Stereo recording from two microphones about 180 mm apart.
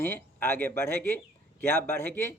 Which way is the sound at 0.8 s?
60° right (ahead or behind).